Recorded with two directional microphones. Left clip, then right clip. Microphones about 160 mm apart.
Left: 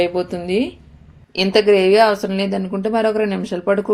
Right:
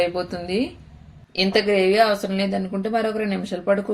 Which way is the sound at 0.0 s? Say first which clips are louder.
Left 4 dB; 10° left (ahead or behind).